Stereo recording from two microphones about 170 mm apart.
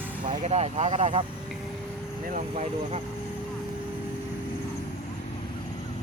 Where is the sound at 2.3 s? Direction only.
45° right (ahead or behind).